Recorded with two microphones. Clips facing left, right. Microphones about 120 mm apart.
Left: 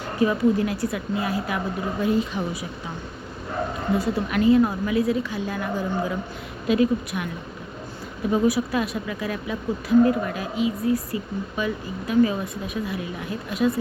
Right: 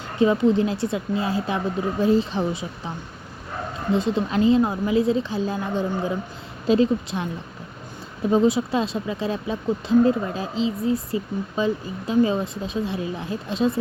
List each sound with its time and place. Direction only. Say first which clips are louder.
0.2 s speech: right 2 dB; 25° right (ahead or behind)
3.9 s speech: right 2 dB; 20° right (ahead or behind)
8.3 s speech: right 2 dB; 25° right (ahead or behind)